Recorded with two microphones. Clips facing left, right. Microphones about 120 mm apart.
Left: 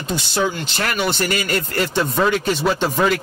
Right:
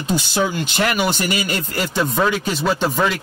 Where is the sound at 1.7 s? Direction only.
Centre (ahead or behind).